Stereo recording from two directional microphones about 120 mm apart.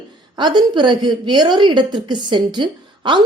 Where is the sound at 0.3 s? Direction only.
40° right (ahead or behind).